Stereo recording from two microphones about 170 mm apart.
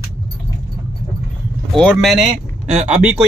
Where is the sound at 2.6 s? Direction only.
40° right (ahead or behind).